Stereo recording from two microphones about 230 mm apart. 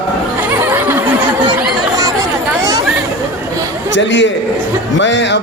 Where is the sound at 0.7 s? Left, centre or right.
Centre.